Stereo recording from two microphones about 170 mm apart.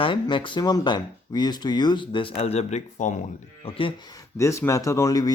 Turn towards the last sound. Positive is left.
turn(degrees=20)  # may be behind; listen again after turning